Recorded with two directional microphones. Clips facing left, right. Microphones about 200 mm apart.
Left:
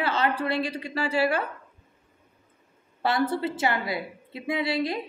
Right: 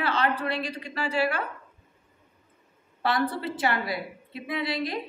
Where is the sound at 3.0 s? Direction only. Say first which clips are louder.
Left 2 dB; 25° left (ahead or behind).